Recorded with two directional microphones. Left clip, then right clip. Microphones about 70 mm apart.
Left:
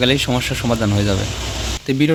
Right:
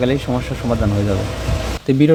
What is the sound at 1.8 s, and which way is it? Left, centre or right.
Speech, right.